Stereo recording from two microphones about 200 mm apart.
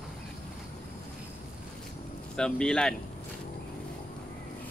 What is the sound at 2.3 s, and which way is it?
Speech, 5° left (ahead or behind).